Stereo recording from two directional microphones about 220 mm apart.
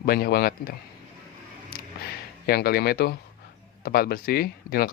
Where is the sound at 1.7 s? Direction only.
45° left (ahead or behind).